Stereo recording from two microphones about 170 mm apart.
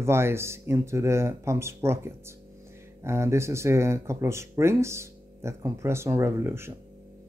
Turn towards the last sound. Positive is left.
turn(degrees=-15)  # may be behind; listen again after turning